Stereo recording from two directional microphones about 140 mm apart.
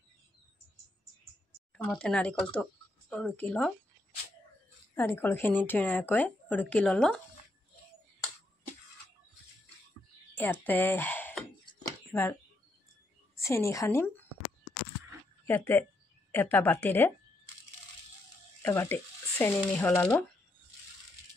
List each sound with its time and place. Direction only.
1.9 s speech: 5° left (ahead or behind)
4.9 s speech: 15° left (ahead or behind)
10.3 s speech: 15° left (ahead or behind)
11.8 s a sound: 20° left (ahead or behind)
13.4 s a woman's voice: 20° left (ahead or behind)
15.4 s speech: 15° left (ahead or behind)
18.6 s speech: 20° left (ahead or behind)